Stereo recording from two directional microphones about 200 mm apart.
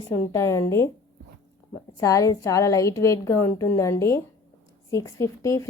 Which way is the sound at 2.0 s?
15° left (ahead or behind).